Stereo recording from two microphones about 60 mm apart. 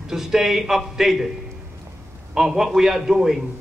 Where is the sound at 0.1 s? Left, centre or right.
Centre.